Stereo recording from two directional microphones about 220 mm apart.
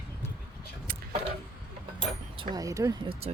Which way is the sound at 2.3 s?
20° right (ahead or behind).